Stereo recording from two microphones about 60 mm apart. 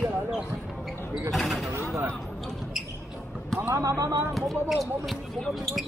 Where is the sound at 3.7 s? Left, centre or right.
Right.